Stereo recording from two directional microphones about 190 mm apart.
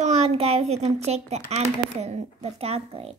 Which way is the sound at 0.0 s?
35° right (ahead or behind).